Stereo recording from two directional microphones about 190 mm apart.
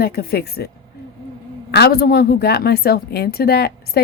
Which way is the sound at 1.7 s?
55° left (ahead or behind).